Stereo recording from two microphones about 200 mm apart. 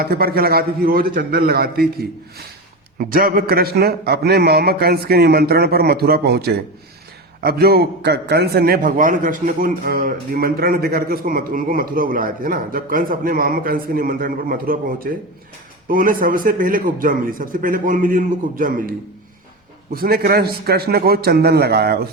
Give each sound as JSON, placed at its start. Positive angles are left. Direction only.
{"t": 0.0, "sound": "a man's voice", "side_deg": -50}